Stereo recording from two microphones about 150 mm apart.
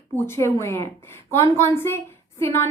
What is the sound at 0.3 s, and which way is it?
Speech, 20° left (ahead or behind).